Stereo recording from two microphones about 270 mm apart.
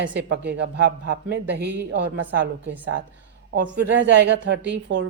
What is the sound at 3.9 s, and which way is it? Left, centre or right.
A woman's voice, right.